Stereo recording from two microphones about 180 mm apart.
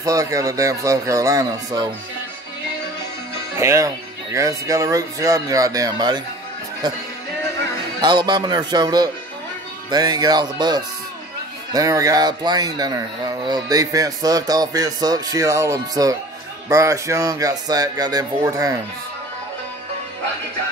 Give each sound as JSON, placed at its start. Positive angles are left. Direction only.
{"t": 0.0, "sound": "speech", "side_deg": -20}
{"t": 3.5, "sound": "speech", "side_deg": -15}
{"t": 8.0, "sound": "speech", "side_deg": -25}